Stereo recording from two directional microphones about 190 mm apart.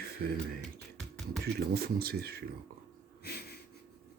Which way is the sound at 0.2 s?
55° right (ahead or behind).